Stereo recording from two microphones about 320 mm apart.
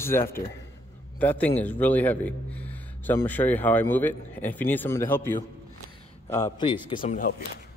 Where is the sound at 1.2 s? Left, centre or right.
Centre.